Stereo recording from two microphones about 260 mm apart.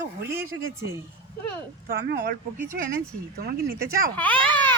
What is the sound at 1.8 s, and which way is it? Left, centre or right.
Speech, right.